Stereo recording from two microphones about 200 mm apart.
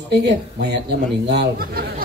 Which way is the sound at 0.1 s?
55° right (ahead or behind).